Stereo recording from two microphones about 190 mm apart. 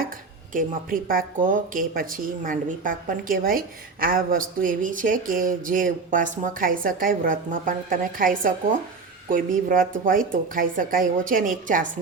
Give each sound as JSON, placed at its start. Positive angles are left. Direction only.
{"t": 0.5, "sound": "speech", "side_deg": -45}